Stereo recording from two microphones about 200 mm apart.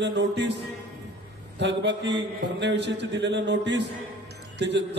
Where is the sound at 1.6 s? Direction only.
60° right (ahead or behind).